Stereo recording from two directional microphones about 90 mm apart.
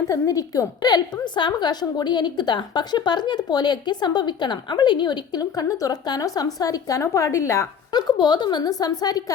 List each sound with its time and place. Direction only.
0.1 s a woman's voice: 40° left (ahead or behind)
7.9 s a woman's voice: 55° left (ahead or behind)